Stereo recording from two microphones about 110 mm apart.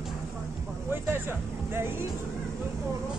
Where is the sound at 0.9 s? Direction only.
20° right (ahead or behind).